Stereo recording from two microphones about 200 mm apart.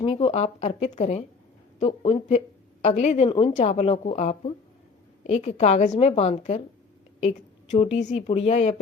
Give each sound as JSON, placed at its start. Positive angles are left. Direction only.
{"t": 0.0, "sound": "a woman's voice", "side_deg": 30}